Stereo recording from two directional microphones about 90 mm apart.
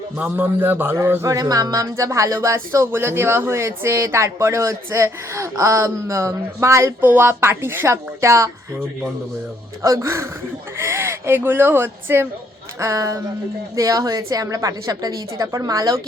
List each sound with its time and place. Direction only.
0.2 s speech: 20° right (ahead or behind)
1.3 s speech: 40° right (ahead or behind)
9.8 s speech: 40° right (ahead or behind)
12.8 s speech: 35° right (ahead or behind)